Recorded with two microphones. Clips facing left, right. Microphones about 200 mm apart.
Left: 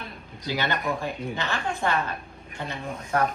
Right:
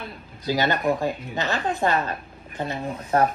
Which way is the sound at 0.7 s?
40° right (ahead or behind).